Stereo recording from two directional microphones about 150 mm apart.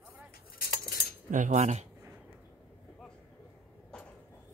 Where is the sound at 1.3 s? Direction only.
55° right (ahead or behind).